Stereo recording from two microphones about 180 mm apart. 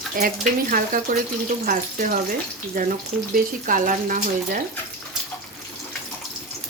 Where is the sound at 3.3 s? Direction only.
50° right (ahead or behind).